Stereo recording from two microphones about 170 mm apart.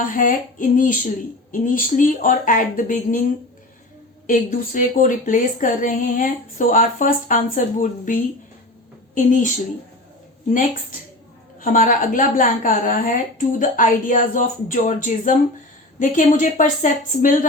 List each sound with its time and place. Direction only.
0.0 s speech: 50° left (ahead or behind)
4.3 s speech: 50° left (ahead or behind)
11.6 s speech: 55° left (ahead or behind)